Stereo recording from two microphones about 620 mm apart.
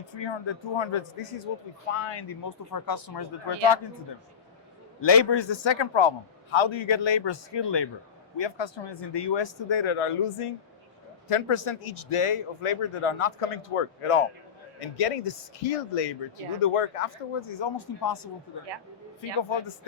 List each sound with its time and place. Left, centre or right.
0.1 s speech: left
2.0 s speech: left
4.9 s speech: left
17.6 s speech: left
19.4 s speech: left